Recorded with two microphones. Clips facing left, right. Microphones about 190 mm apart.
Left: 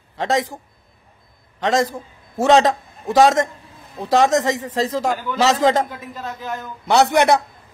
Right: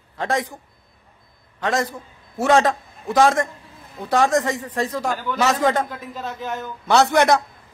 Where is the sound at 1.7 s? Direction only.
90° left.